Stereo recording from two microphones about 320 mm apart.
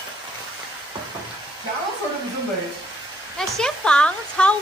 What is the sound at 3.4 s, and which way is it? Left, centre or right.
A woman's voice, centre.